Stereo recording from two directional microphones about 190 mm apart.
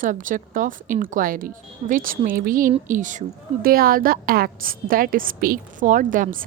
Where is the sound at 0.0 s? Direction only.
45° right (ahead or behind).